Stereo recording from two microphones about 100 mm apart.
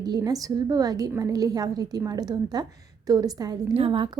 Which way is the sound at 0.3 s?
40° right (ahead or behind).